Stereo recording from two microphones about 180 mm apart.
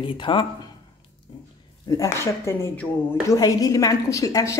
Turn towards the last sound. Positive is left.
turn(degrees=20)  # may be behind; listen again after turning